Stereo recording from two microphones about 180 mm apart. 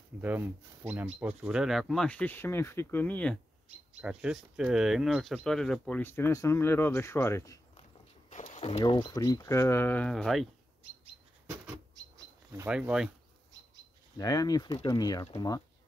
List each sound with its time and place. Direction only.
0.2 s speech: 10° right (ahead or behind); by 3.3 s 10° left (ahead or behind)
4.0 s speech: 5° right (ahead or behind); by 7.6 s 15° left (ahead or behind)
8.5 s a sound: 35° left (ahead or behind)
8.8 s speech: 25° left (ahead or behind); by 10.5 s centre (ahead or behind)
12.5 s speech: 10° right (ahead or behind)
14.1 s speech: 20° left (ahead or behind)